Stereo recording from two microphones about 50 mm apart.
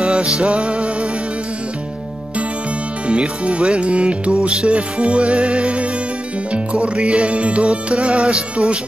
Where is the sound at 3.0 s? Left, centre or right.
Right.